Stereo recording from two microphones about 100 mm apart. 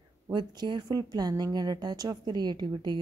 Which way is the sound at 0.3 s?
50° right (ahead or behind).